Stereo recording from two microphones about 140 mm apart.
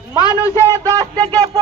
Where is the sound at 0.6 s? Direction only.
25° right (ahead or behind).